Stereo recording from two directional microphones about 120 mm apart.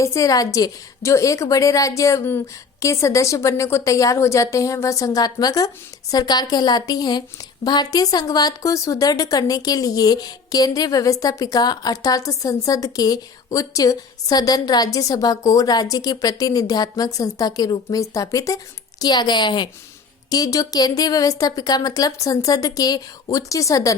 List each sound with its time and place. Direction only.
0.0 s a woman's voice: 25° left (ahead or behind)